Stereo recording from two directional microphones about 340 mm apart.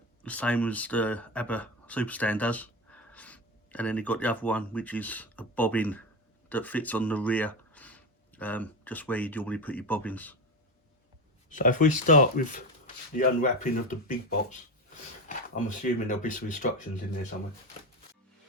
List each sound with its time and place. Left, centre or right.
0.2 s speech: centre
11.4 s speech: left